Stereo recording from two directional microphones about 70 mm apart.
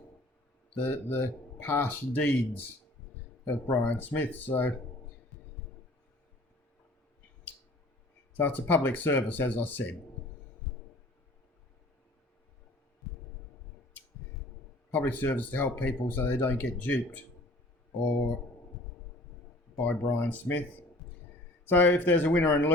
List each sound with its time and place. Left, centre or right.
0.8 s speech: left
3.7 s speech: left
8.3 s speech: left
14.9 s speech: left
19.8 s speech: left
21.7 s speech: left